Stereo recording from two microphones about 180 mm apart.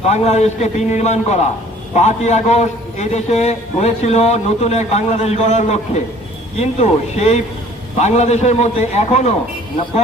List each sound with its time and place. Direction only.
0.0 s a man's voice: 40° left (ahead or behind)